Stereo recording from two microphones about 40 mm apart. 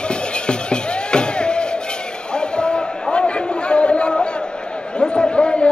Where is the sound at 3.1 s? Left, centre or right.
Left.